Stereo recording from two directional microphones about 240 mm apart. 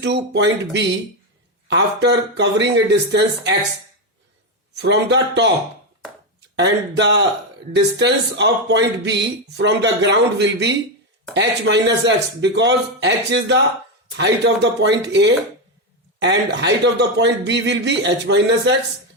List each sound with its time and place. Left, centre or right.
0.0 s speech: right
4.8 s speech: right
6.6 s speech: right